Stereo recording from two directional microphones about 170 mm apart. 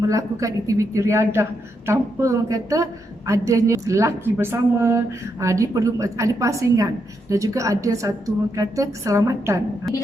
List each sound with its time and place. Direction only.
0.1 s a woman's voice: 20° right (ahead or behind)